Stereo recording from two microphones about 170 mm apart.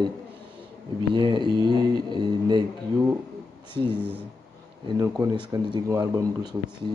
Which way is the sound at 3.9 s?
10° left (ahead or behind).